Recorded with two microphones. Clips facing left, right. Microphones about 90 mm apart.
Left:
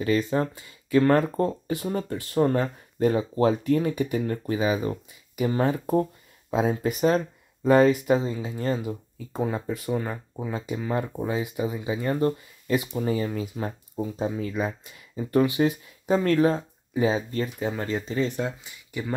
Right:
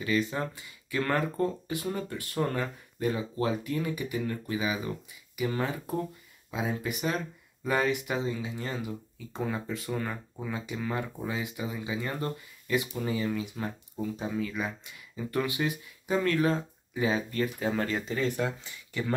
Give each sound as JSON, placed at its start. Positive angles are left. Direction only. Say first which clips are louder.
{"t": 0.0, "sound": "speech", "louder": "left 6 dB", "side_deg": 35}
{"t": 8.7, "sound": "speech", "louder": "left 5 dB", "side_deg": 20}